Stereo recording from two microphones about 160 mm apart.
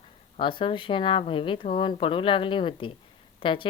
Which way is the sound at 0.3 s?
30° left (ahead or behind).